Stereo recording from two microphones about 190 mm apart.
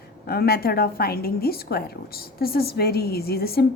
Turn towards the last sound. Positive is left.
turn(degrees=55)  # may be behind; listen again after turning